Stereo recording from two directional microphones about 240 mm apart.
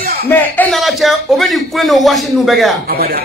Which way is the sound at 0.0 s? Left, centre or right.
Right.